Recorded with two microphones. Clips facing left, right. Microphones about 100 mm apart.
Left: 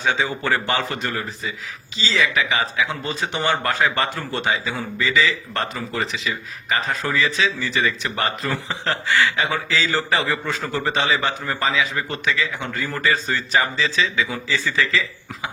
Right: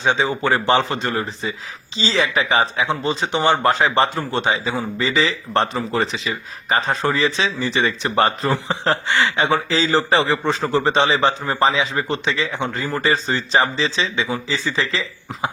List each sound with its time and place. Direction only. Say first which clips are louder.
0.0 s speech: right 3 dB; 25° right (ahead or behind)